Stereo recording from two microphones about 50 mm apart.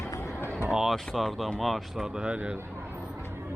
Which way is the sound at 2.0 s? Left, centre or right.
Centre.